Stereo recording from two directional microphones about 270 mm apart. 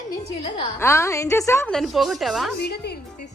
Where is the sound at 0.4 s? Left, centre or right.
Centre.